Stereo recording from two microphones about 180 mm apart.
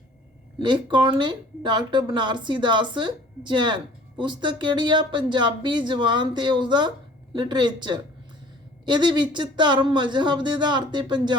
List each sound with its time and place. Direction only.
0.6 s speech: 25° right (ahead or behind)